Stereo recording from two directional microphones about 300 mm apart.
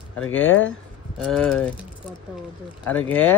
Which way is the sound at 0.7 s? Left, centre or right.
Centre.